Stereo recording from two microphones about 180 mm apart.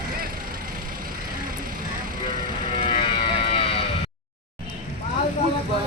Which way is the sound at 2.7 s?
30° left (ahead or behind).